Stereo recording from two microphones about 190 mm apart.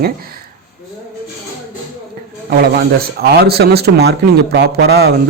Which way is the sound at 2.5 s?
55° right (ahead or behind).